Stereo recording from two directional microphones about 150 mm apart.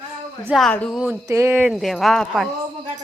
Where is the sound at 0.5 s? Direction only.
5° left (ahead or behind).